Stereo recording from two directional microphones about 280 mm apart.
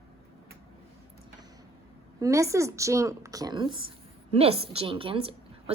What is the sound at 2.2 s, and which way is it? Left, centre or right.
A woman's voice, centre.